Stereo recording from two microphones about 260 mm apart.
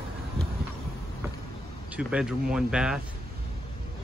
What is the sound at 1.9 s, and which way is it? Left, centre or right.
Speech, centre.